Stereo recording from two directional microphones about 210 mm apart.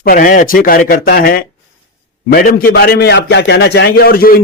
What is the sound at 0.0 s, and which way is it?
A man's voice, 40° left (ahead or behind).